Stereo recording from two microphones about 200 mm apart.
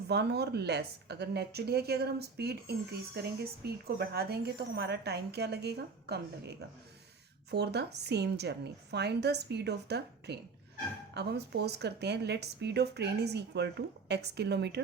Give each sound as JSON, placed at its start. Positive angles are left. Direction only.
{"t": 0.1, "sound": "a woman's voice", "side_deg": -55}